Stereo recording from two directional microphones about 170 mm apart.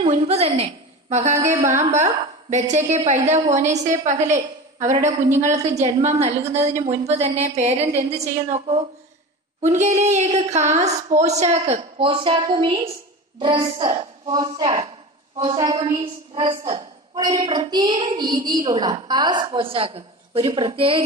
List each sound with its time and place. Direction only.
0.0 s a woman's voice: 40° right (ahead or behind)